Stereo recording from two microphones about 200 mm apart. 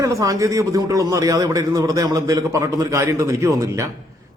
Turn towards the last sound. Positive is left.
turn(degrees=-15)  # may be behind; listen again after turning